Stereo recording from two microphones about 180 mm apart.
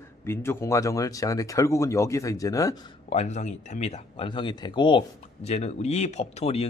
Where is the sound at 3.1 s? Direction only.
40° left (ahead or behind).